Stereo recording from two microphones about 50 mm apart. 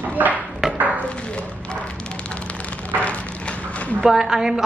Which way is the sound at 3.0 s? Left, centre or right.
Left.